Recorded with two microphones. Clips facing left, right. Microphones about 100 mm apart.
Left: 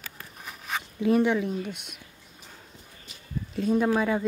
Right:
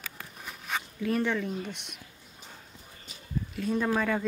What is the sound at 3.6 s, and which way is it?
Speech, 15° left (ahead or behind).